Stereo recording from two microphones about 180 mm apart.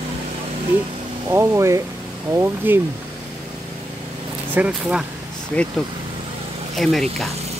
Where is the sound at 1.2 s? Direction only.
15° right (ahead or behind).